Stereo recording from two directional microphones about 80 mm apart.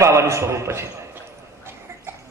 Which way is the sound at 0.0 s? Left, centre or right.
Right.